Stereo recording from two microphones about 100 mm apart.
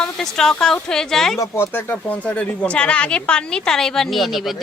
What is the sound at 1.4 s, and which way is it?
A woman's voice, 25° left (ahead or behind).